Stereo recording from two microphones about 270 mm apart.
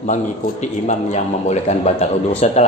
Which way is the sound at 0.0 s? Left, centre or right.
Left.